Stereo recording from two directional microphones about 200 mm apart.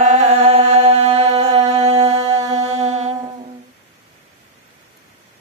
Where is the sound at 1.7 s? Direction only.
35° right (ahead or behind).